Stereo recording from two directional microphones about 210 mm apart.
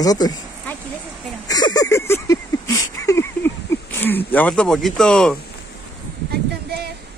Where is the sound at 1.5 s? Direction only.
20° left (ahead or behind).